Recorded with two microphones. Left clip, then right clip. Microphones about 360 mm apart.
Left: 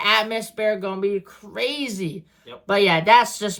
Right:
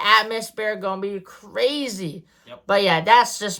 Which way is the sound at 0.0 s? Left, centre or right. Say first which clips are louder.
Right 2 dB; centre.